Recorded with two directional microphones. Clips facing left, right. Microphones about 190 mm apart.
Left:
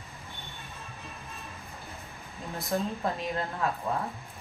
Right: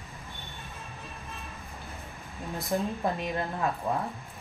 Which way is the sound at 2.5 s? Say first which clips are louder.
Right 1 dB; 15° right (ahead or behind).